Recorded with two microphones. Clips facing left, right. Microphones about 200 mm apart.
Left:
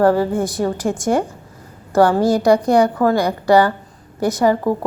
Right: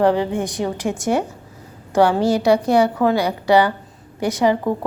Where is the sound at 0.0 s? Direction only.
15° right (ahead or behind).